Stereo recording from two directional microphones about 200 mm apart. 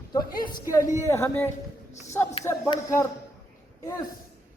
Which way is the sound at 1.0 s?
15° left (ahead or behind).